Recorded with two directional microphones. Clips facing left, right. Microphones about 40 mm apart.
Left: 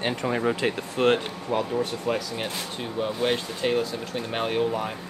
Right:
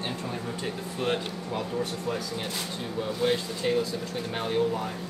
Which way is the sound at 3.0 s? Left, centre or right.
Left.